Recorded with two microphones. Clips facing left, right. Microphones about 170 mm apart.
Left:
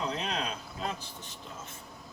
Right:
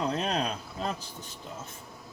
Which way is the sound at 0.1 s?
45° right (ahead or behind).